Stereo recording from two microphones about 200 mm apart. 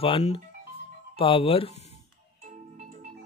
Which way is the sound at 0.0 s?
30° left (ahead or behind).